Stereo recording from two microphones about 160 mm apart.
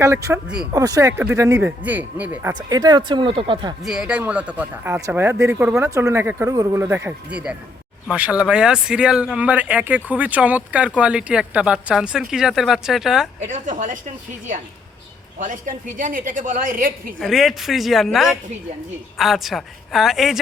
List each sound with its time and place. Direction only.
0.0 s speech: 20° right (ahead or behind)
0.4 s a woman's voice: 5° right (ahead or behind)
0.7 s speech: 20° right (ahead or behind)
2.6 s speech: 25° right (ahead or behind)
3.8 s a woman's voice: 5° right (ahead or behind)
13.5 s a woman's voice: 55° right (ahead or behind)
15.4 s a woman's voice: 55° right (ahead or behind)
17.2 s a woman's voice: centre (ahead or behind)